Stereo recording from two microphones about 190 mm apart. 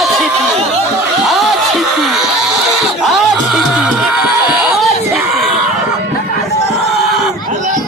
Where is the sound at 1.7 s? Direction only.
Centre (ahead or behind).